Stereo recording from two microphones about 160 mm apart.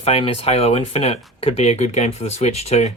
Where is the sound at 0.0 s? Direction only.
40° left (ahead or behind).